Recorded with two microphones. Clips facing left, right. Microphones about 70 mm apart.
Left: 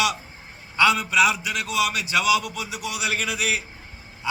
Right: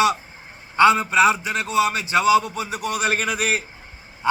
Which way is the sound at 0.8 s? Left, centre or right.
Right.